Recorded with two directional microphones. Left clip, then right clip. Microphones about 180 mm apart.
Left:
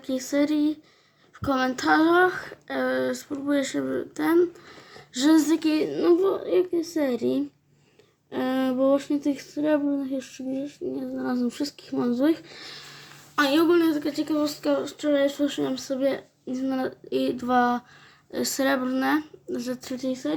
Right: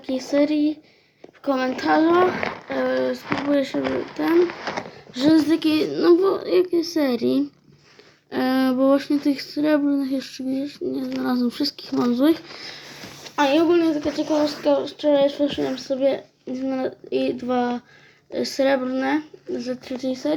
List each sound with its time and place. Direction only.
0.1 s speech: 35° left (ahead or behind)
5.5 s speech: 15° left (ahead or behind)
12.5 s speech: 25° left (ahead or behind)
13.4 s speech: 50° left (ahead or behind); by 20.3 s 30° left (ahead or behind)